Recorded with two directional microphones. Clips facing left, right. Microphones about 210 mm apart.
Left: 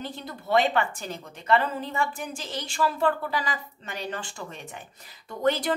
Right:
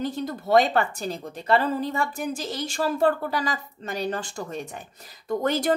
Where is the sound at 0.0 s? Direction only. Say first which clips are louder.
Right 8 dB; 45° right (ahead or behind).